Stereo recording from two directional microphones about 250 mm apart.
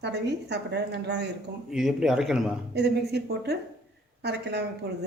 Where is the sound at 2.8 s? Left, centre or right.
Right.